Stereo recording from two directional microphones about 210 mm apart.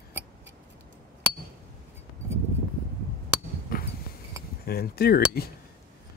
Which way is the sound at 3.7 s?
45° left (ahead or behind).